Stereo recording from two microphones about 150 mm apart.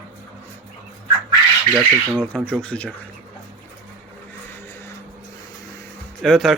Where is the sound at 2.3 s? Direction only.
5° left (ahead or behind).